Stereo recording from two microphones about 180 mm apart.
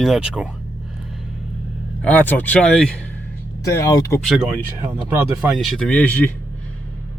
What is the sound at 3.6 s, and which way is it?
Speech, 20° left (ahead or behind).